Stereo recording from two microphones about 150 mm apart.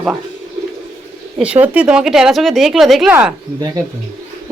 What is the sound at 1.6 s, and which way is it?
Speech, 10° right (ahead or behind).